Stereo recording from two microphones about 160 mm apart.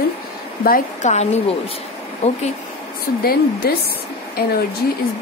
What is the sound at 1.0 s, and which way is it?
Speech, 45° left (ahead or behind).